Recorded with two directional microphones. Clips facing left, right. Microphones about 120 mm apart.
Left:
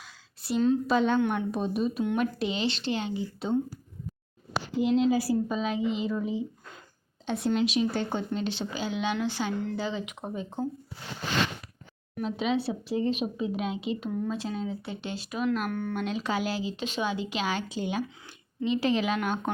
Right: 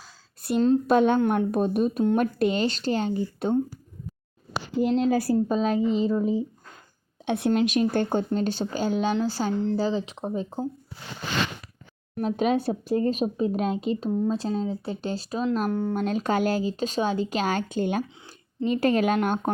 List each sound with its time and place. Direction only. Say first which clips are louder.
0.4 s speech: right 4 dB; 50° right (ahead or behind)
4.8 s speech: right 2 dB; 45° right (ahead or behind)
7.3 s speech: right 4 dB; 60° right (ahead or behind); by 10.7 s 35° right (ahead or behind)
12.1 s speech: right 5 dB; 50° right (ahead or behind)
14.1 s speech: right 6 dB; 25° right (ahead or behind); by 19.5 s 45° right (ahead or behind)